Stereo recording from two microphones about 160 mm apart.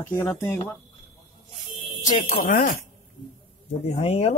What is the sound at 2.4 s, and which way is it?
Speech, 60° left (ahead or behind).